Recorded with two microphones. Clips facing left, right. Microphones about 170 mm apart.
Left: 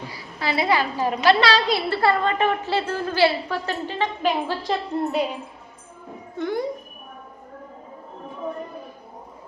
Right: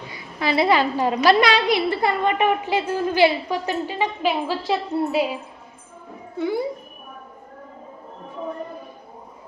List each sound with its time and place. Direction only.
0.1 s a woman's voice: 20° right (ahead or behind); by 5.3 s 5° right (ahead or behind)
6.3 s speech: 5° right (ahead or behind)